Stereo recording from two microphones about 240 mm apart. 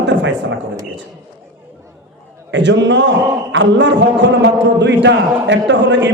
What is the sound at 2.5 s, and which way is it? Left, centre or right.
A man's voice, right.